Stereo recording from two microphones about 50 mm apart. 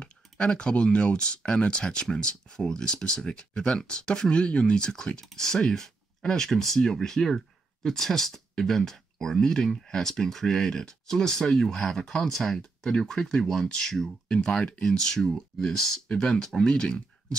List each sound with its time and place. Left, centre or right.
0.0 s speech: centre